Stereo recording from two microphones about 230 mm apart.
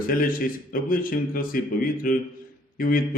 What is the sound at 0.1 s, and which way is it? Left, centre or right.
A man's voice, left.